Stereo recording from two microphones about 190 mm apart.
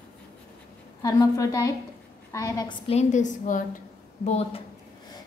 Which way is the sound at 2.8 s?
35° left (ahead or behind).